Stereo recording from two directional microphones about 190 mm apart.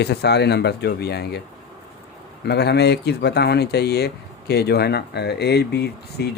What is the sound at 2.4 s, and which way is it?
Speech, 60° left (ahead or behind).